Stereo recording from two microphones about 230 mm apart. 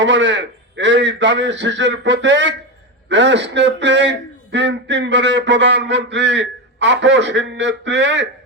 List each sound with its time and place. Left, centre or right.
0.0 s a man's voice: right